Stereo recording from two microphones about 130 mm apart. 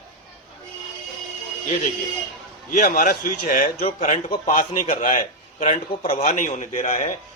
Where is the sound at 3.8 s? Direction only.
70° left (ahead or behind).